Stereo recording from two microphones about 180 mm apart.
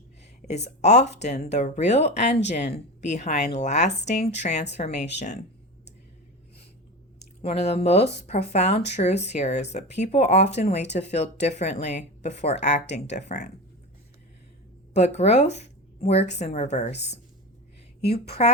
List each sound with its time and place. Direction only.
0.4 s speech: 40° left (ahead or behind)
7.4 s speech: 35° left (ahead or behind)
12.8 s speech: 75° left (ahead or behind)
13.1 s speech: 40° left (ahead or behind)
14.9 s speech: 40° left (ahead or behind)
18.1 s speech: 35° left (ahead or behind)